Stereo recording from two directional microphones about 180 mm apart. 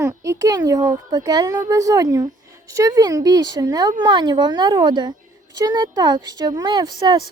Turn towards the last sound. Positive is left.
turn(degrees=-25)  # may be behind; listen again after turning